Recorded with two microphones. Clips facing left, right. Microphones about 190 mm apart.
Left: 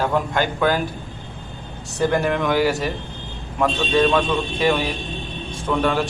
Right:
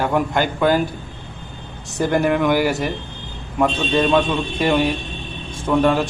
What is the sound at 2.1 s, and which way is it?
A man's voice, 10° right (ahead or behind).